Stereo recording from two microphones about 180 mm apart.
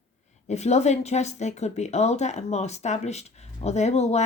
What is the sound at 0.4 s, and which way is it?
Speech, 40° left (ahead or behind).